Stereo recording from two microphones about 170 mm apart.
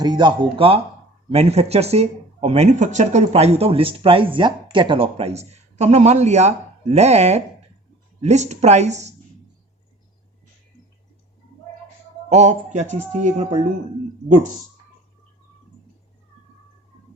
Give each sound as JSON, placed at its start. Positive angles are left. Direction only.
{"t": 0.0, "sound": "speech", "side_deg": -25}
{"t": 12.3, "sound": "a man's voice", "side_deg": -45}